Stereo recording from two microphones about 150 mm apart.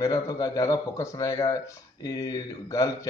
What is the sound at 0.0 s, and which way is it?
Speech, 20° left (ahead or behind).